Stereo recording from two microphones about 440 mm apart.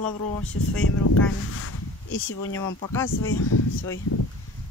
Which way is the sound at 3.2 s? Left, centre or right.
Left.